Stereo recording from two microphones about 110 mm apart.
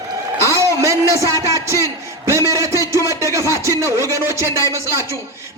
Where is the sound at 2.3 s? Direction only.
30° right (ahead or behind).